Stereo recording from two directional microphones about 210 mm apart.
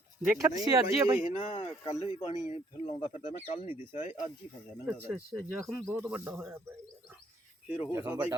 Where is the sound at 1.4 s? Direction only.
25° left (ahead or behind).